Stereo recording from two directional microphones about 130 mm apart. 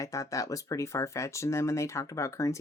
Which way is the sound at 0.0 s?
25° left (ahead or behind).